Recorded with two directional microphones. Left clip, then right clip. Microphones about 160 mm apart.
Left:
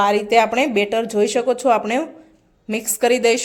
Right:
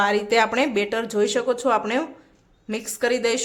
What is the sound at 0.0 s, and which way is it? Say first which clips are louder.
Speech: left 4 dB; 10° left (ahead or behind).